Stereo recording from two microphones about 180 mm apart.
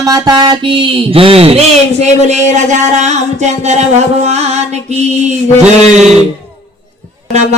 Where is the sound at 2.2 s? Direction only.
40° right (ahead or behind).